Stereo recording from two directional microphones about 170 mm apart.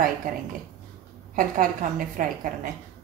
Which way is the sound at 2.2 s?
50° right (ahead or behind).